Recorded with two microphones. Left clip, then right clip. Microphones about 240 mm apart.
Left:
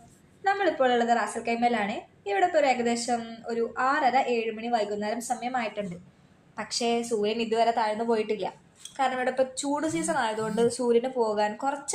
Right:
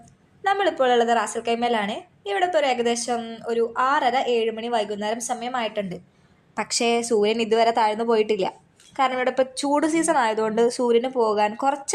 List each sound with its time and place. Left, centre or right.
0.4 s a woman's voice: right